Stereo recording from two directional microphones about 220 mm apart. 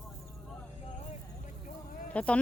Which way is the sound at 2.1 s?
5° left (ahead or behind).